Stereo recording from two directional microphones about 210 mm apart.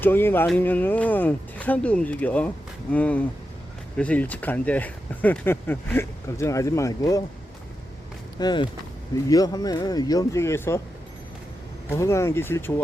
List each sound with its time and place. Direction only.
0.0 s speech: 10° left (ahead or behind)
8.4 s speech: 20° left (ahead or behind)
11.9 s speech: 15° left (ahead or behind)